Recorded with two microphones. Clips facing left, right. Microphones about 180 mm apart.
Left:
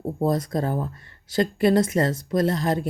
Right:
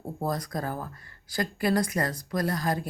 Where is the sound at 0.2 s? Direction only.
25° left (ahead or behind).